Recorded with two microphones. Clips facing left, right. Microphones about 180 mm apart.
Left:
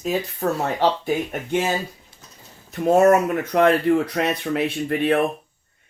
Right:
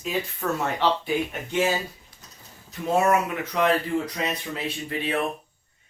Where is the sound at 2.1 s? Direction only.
25° left (ahead or behind).